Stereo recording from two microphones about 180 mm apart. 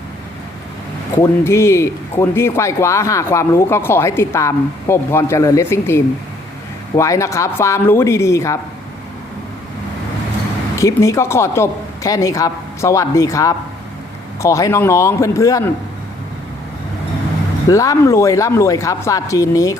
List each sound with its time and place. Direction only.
1.2 s speech: 15° left (ahead or behind)
10.8 s speech: 20° left (ahead or behind)
17.7 s speech: 20° left (ahead or behind)